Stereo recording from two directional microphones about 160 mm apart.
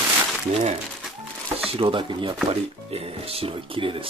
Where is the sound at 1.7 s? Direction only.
35° right (ahead or behind).